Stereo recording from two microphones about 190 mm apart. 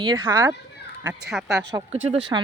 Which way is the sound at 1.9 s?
35° right (ahead or behind).